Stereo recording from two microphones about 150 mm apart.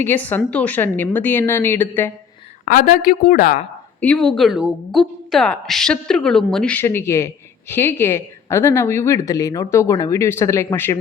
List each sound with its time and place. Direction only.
0.0 s a woman's voice: 10° left (ahead or behind)
2.6 s a woman's voice: 65° left (ahead or behind)
4.0 s a woman's voice: 5° left (ahead or behind)